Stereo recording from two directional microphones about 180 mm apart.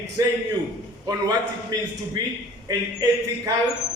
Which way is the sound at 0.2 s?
20° right (ahead or behind).